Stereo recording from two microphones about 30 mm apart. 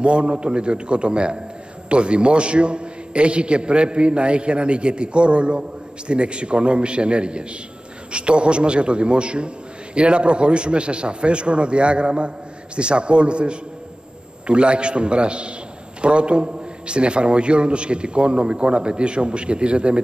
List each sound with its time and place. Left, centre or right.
0.0 s a man's voice: right